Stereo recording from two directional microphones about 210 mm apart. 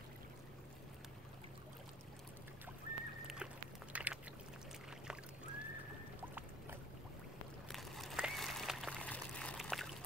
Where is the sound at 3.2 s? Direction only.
5° right (ahead or behind).